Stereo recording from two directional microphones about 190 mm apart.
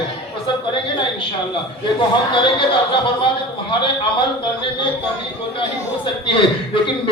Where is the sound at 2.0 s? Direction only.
25° left (ahead or behind).